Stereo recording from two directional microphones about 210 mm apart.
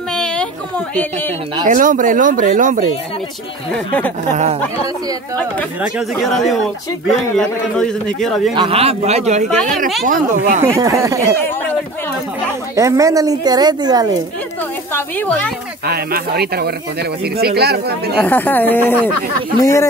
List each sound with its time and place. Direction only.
0.1 s a sound: 5° left (ahead or behind)
1.7 s speech: 40° right (ahead or behind)
3.7 s a man's voice: 5° left (ahead or behind)
5.8 s a man's voice: centre (ahead or behind)
8.5 s speech: 25° right (ahead or behind)
10.6 s speech: 15° right (ahead or behind)
12.7 s speech: 15° right (ahead or behind)
14.9 s speech: 10° left (ahead or behind)
15.8 s speech: 50° right (ahead or behind)
18.2 s speech: 10° left (ahead or behind)